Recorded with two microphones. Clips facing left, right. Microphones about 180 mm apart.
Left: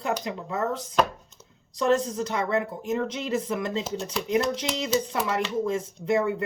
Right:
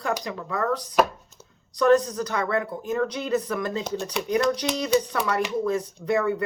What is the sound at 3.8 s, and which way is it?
Speech, centre (ahead or behind).